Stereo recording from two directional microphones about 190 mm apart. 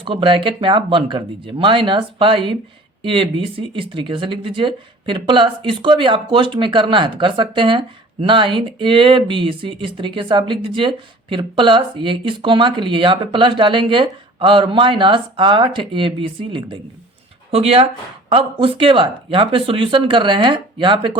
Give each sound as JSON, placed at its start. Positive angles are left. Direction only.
{"t": 0.0, "sound": "speech", "side_deg": -25}